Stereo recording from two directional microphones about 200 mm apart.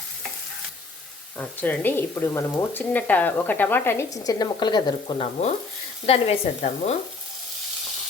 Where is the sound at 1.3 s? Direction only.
10° left (ahead or behind); by 7.0 s 30° left (ahead or behind).